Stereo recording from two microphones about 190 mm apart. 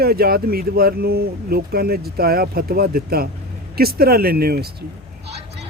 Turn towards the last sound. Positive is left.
turn(degrees=-55)  # may be behind; listen again after turning